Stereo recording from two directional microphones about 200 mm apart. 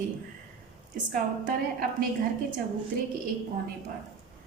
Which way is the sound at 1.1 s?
40° right (ahead or behind).